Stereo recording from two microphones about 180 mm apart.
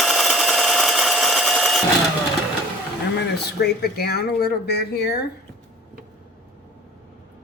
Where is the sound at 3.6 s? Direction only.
60° left (ahead or behind).